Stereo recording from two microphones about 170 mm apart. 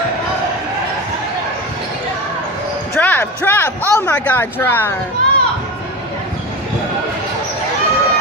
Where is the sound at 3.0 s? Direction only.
10° left (ahead or behind).